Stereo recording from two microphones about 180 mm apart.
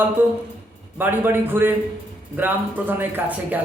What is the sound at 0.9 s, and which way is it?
A man's voice, 10° right (ahead or behind).